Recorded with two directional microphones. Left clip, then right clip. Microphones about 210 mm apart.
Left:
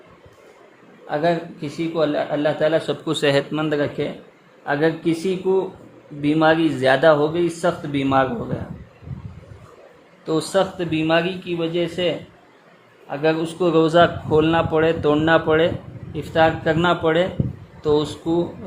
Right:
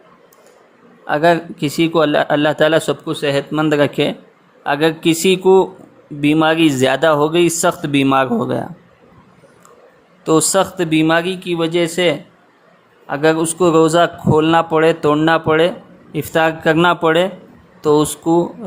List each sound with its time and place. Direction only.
1.0 s a man's voice: 30° right (ahead or behind)
3.1 s speech: centre (ahead or behind)
3.5 s speech: 20° right (ahead or behind)
10.2 s speech: 20° right (ahead or behind)
16.1 s speech: 25° right (ahead or behind)